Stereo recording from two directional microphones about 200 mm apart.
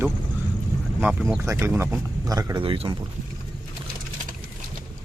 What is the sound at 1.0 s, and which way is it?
Speech, centre (ahead or behind).